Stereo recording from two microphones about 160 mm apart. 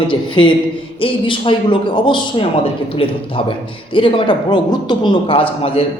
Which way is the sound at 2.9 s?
35° left (ahead or behind).